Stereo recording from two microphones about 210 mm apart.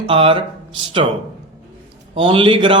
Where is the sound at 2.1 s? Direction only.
25° right (ahead or behind).